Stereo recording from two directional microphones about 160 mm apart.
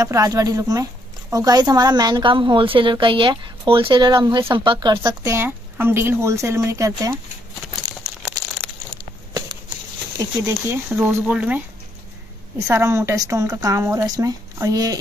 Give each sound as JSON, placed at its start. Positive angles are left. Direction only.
{"t": 0.0, "sound": "a woman's voice", "side_deg": -20}
{"t": 8.2, "sound": "crumpling", "side_deg": -5}
{"t": 10.1, "sound": "a woman's voice", "side_deg": -15}